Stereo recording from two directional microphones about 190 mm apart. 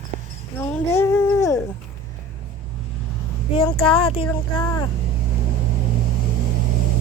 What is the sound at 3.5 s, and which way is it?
Speech, 30° left (ahead or behind).